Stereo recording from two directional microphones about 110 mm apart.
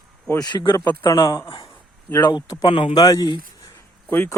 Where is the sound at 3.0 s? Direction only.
35° left (ahead or behind).